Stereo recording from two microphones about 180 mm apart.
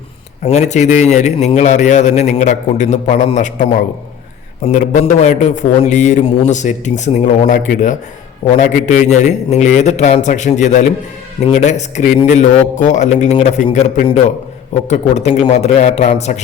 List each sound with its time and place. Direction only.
0.4 s a man's voice: 40° left (ahead or behind)